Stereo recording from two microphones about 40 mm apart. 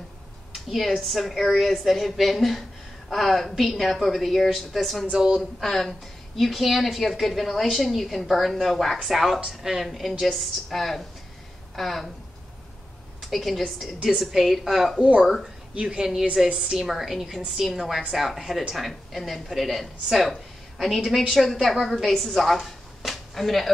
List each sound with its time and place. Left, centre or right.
0.7 s a woman's voice: centre
5.1 s speech: right
5.4 s a woman's voice: centre
13.2 s a woman's voice: centre
15.9 s a woman's voice: centre